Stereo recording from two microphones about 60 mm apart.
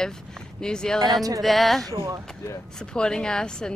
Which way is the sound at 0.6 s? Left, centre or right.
Centre.